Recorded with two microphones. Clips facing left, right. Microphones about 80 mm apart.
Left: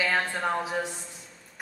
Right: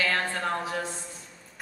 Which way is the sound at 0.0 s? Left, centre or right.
Centre.